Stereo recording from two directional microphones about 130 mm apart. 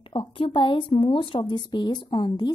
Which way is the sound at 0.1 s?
40° left (ahead or behind).